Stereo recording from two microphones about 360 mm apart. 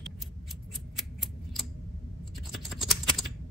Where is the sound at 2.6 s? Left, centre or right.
Centre.